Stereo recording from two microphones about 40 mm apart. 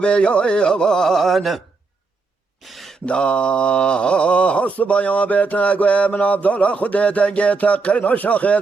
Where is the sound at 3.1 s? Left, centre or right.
Left.